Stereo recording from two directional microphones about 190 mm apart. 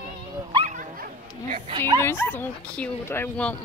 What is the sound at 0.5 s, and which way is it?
Dog, 40° right (ahead or behind).